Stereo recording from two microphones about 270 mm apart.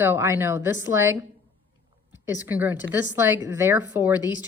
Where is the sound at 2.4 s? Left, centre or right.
Centre.